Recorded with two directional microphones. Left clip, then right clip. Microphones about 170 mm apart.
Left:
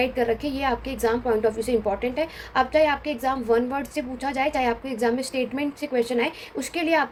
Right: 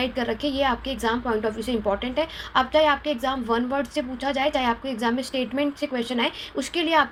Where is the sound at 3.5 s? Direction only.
35° right (ahead or behind).